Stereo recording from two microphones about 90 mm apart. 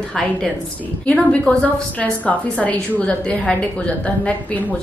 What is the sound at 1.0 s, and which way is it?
A woman's voice, 15° left (ahead or behind).